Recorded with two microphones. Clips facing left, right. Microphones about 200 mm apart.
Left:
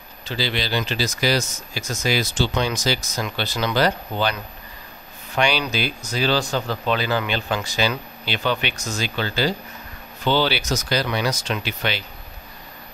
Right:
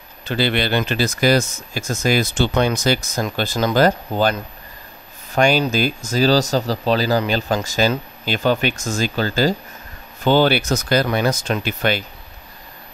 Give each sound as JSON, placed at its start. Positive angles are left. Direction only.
{"t": 0.2, "sound": "speech", "side_deg": -55}